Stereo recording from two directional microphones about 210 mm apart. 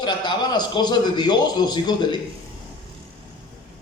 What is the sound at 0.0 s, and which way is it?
A man's voice, 20° left (ahead or behind).